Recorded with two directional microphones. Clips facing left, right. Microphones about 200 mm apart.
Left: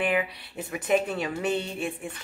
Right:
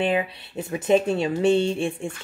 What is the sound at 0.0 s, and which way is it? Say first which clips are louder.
Speech: right 3 dB; 25° right (ahead or behind).